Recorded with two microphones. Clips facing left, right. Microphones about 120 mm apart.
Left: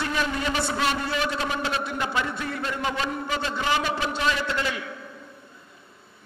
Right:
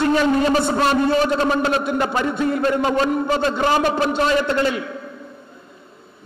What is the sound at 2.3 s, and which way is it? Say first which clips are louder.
Speech: right 11 dB; 20° right (ahead or behind).